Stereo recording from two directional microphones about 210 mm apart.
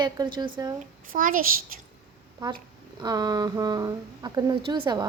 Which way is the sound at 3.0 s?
20° right (ahead or behind).